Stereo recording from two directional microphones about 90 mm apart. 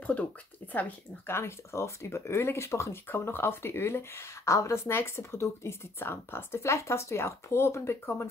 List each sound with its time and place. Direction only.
0.0 s speech: 15° left (ahead or behind)